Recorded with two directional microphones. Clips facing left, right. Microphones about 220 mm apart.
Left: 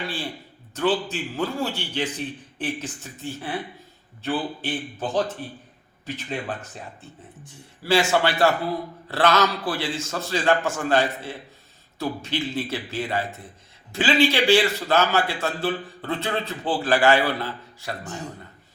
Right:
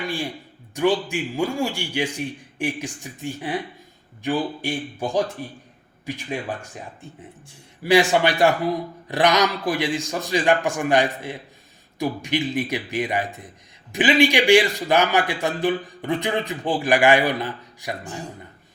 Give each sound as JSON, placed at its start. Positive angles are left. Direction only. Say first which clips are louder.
{"t": 0.0, "sound": "a man's voice", "louder": "right 3 dB", "side_deg": -15}